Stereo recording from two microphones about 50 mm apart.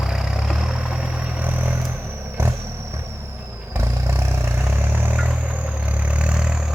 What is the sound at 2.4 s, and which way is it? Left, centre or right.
Vehicle, right.